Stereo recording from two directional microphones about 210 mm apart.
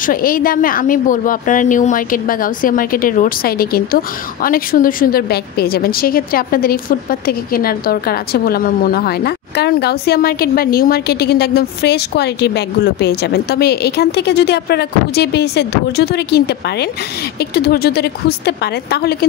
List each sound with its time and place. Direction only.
0.0 s a woman's voice: 45° left (ahead or behind)